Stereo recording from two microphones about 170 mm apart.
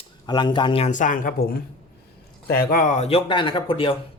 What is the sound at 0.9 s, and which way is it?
Speech, 50° left (ahead or behind).